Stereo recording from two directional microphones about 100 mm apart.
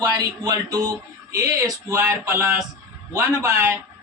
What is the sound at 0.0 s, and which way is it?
A man's voice, 40° right (ahead or behind).